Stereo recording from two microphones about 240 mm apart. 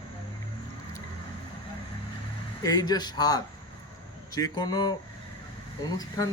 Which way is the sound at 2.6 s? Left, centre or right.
Centre.